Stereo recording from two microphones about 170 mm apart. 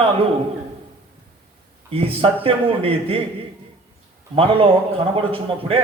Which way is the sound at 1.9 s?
35° right (ahead or behind).